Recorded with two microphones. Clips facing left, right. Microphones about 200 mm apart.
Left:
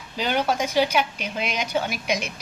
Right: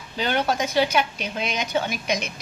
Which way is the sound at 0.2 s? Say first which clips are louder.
Even; 10° left (ahead or behind).